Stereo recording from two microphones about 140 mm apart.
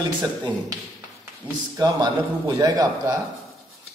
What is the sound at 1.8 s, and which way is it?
A man's voice, 30° right (ahead or behind).